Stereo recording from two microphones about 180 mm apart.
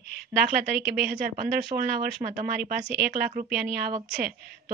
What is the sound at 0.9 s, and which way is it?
A woman's voice, 55° right (ahead or behind).